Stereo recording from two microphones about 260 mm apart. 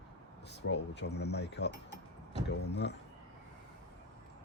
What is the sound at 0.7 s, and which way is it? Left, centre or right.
Speech, left.